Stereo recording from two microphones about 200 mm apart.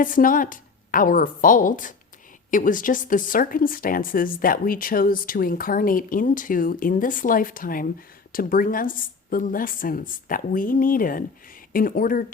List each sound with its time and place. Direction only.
0.0 s speech: 40° left (ahead or behind)